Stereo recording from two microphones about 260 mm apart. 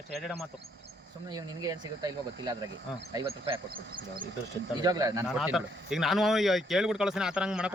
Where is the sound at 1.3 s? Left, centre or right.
Centre.